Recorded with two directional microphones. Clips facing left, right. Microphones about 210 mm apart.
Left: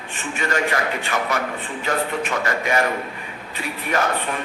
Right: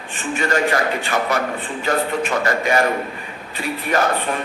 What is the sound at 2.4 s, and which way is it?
Speech, 35° right (ahead or behind).